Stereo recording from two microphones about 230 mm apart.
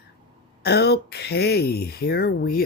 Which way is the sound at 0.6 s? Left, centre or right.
Left.